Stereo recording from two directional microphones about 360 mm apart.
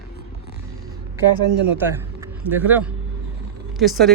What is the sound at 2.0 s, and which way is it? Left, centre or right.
A man's voice, centre.